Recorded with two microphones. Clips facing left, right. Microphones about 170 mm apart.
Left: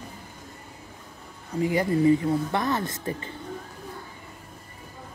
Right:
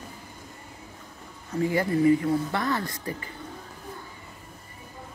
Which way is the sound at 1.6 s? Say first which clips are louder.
Left 1 dB; 15° left (ahead or behind).